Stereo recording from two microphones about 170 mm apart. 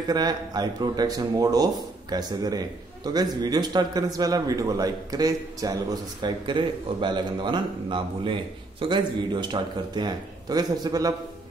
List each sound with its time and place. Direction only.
0.1 s speech: 25° right (ahead or behind)